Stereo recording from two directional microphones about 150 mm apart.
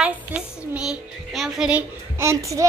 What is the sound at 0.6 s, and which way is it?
Child singing, 5° right (ahead or behind).